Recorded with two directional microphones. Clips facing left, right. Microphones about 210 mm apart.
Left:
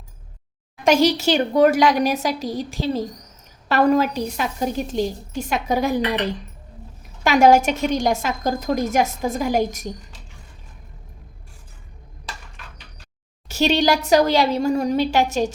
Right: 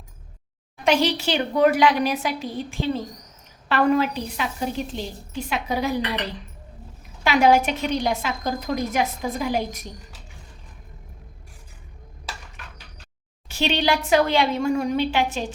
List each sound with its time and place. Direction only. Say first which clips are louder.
0.9 s a woman's voice: left 4 dB; 45° left (ahead or behind)
7.3 s a woman's voice: left 3 dB; 45° left (ahead or behind)
13.5 s a woman's voice: left 4 dB; 40° left (ahead or behind)